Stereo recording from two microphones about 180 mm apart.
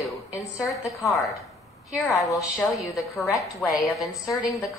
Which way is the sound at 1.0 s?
Centre (ahead or behind).